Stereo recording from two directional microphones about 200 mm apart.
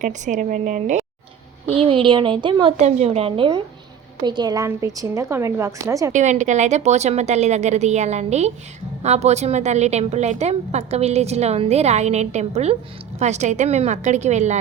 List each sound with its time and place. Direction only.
0.0 s a woman's voice: 40° right (ahead or behind)
1.7 s a woman's voice: 30° right (ahead or behind)
6.1 s a woman's voice: 35° right (ahead or behind)